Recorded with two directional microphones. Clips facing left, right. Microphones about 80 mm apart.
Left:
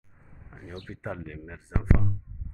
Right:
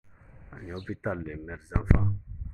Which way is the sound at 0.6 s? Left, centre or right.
Centre.